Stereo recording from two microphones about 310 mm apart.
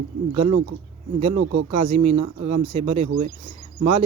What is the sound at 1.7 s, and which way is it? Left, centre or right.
Speech, centre.